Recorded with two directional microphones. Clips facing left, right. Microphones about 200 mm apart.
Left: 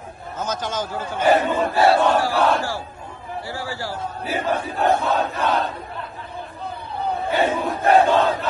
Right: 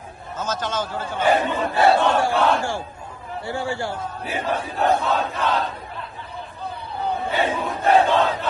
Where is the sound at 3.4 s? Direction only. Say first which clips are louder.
Right 5 dB; 25° right (ahead or behind).